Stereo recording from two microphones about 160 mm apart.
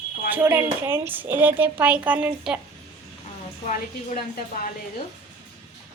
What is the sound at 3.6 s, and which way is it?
Speech, 60° left (ahead or behind).